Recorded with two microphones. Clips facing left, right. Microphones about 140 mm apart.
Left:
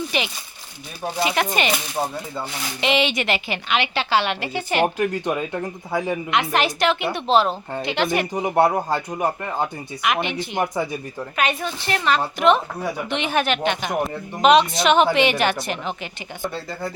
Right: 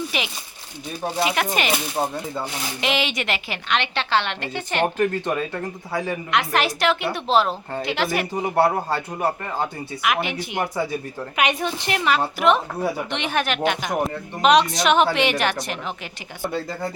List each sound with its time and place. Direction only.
0.1 s a woman's voice: centre (ahead or behind); by 6.1 s 20° left (ahead or behind)
6.3 s speech: centre (ahead or behind)
8.3 s a woman's voice: 20° left (ahead or behind)
10.0 s a woman's voice: 5° right (ahead or behind)